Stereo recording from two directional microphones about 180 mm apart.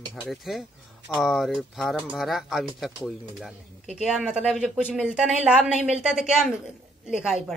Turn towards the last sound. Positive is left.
turn(degrees=-5)  # may be behind; listen again after turning